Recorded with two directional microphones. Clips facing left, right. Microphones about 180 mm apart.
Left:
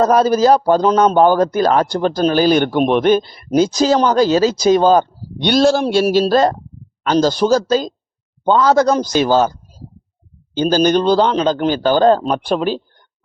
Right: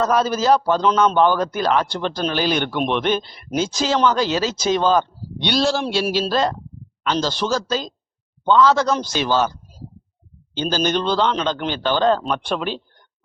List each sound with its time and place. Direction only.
0.0 s a man's voice: 40° left (ahead or behind)
10.6 s a man's voice: 45° left (ahead or behind)